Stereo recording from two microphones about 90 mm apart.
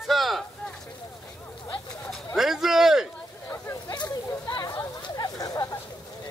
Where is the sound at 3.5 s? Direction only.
30° left (ahead or behind).